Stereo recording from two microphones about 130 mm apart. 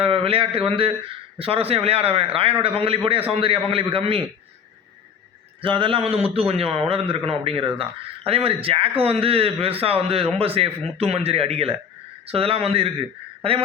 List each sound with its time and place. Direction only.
0.0 s a sound: 45° right (ahead or behind)
1.4 s a man's voice: 45° right (ahead or behind)
5.6 s a man's voice: 40° right (ahead or behind)